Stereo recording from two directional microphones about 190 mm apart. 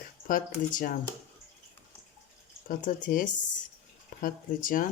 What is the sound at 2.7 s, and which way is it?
Speech, 45° left (ahead or behind).